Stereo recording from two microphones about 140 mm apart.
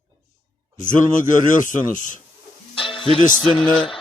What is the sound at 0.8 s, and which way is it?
A man's voice, 70° left (ahead or behind).